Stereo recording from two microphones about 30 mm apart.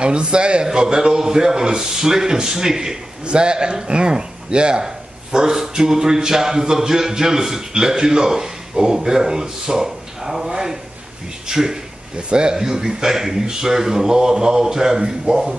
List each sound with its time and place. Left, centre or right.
0.0 s a man's voice: right; by 3.0 s centre
3.3 s speech: right
4.8 s a man's voice: right
12.3 s speech: right
12.5 s a man's voice: centre